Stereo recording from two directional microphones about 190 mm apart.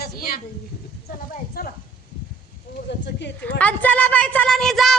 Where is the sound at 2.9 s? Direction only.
65° left (ahead or behind).